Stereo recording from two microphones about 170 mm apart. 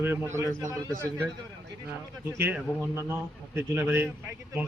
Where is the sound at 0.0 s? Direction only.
10° right (ahead or behind).